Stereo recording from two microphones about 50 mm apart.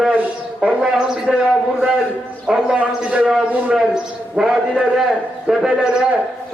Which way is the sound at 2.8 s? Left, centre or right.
Right.